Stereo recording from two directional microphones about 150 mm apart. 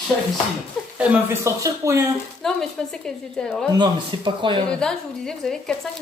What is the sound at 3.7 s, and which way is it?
Speech, 30° right (ahead or behind).